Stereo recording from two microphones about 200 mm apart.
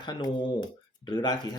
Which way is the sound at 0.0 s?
20° left (ahead or behind).